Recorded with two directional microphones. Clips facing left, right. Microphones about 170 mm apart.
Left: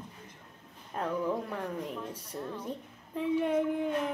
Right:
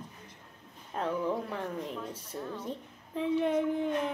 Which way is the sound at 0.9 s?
5° left (ahead or behind).